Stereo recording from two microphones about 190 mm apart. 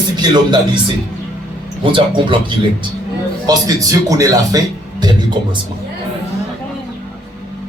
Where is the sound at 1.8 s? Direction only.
25° right (ahead or behind).